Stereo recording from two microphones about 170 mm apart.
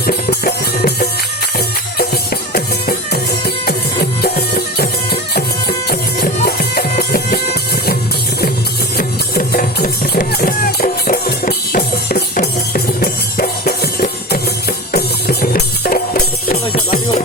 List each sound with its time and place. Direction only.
0.1 s music: 65° left (ahead or behind)
9.0 s music: 60° left (ahead or behind)